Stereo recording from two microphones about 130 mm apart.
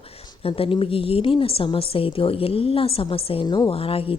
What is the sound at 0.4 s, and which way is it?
A woman's voice, 45° left (ahead or behind).